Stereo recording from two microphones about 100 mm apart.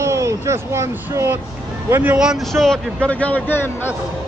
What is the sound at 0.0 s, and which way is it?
Speech, 30° right (ahead or behind).